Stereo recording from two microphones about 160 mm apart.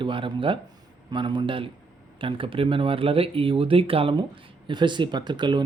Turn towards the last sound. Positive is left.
turn(degrees=-30)  # may be behind; listen again after turning